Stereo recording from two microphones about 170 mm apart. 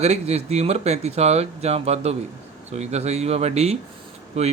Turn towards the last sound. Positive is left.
turn(degrees=-40)  # may be behind; listen again after turning